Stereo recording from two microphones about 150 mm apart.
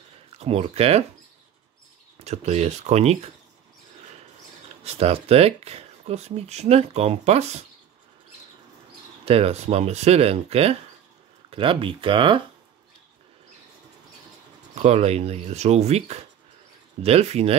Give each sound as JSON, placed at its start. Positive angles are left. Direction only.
{"t": 0.4, "sound": "speech", "side_deg": -40}
{"t": 2.2, "sound": "speech", "side_deg": -45}
{"t": 4.6, "sound": "speech", "side_deg": -45}
{"t": 9.2, "sound": "speech", "side_deg": -40}
{"t": 14.8, "sound": "speech", "side_deg": -45}